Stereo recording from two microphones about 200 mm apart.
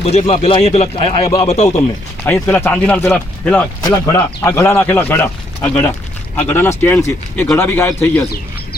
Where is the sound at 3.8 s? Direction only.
20° left (ahead or behind).